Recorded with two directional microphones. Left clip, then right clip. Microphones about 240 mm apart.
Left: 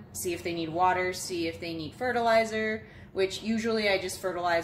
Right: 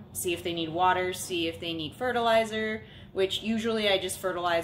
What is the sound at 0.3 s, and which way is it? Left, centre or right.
A woman's voice, centre.